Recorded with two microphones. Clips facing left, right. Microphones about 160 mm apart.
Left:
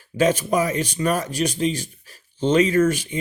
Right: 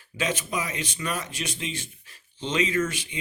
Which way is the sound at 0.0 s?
40° left (ahead or behind).